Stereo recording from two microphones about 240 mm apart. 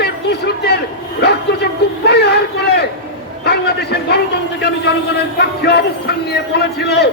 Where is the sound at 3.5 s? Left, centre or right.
Left.